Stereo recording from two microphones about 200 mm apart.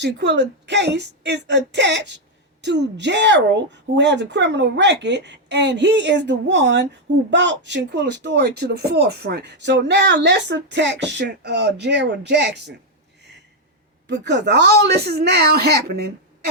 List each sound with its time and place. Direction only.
0.0 s a woman's voice: 60° right (ahead or behind)
14.1 s a woman's voice: 60° right (ahead or behind)